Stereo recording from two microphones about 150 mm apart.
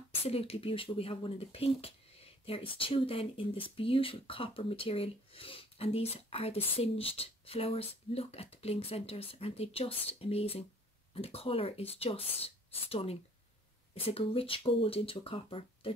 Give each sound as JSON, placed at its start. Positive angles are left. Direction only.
{"t": 0.1, "sound": "speech", "side_deg": 40}